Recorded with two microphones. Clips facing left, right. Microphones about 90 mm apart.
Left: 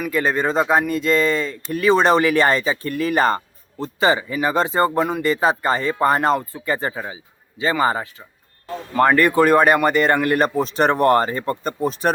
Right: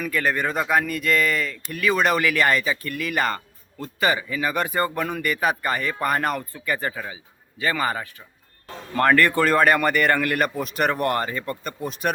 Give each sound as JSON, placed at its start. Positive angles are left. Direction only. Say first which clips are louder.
{"t": 0.1, "sound": "speech", "louder": "left 5 dB", "side_deg": 20}